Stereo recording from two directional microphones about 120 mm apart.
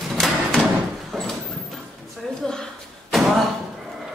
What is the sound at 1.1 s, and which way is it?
Clip-clop, centre (ahead or behind).